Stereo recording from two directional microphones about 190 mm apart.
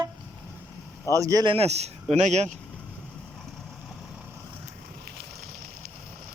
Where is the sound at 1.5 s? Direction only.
35° right (ahead or behind).